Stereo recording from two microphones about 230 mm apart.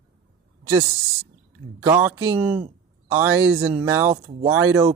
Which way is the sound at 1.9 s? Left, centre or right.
Centre.